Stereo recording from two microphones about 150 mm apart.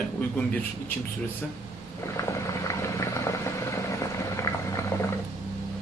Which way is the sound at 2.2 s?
20° left (ahead or behind).